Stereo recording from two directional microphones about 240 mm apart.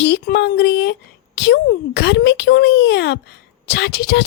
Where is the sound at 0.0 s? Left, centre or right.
Left.